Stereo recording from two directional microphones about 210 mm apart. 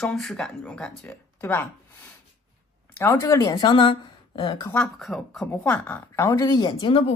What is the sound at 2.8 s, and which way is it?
Speech, 10° left (ahead or behind).